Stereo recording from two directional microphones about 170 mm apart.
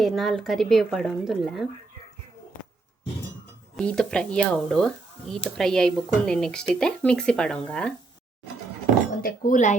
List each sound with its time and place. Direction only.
0.0 s speech: centre (ahead or behind)
3.8 s speech: 5° left (ahead or behind)
9.2 s speech: 50° left (ahead or behind)